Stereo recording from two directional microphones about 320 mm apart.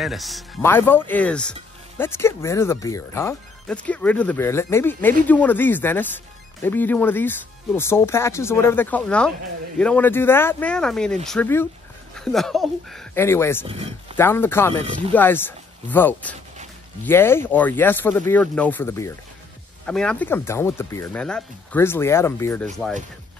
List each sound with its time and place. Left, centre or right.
0.0 s speech: centre
14.8 s speech: centre
15.1 s speech: centre